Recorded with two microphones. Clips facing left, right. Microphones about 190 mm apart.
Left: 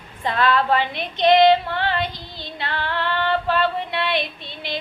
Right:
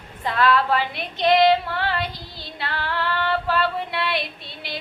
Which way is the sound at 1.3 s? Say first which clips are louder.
Left 2 dB; 25° left (ahead or behind).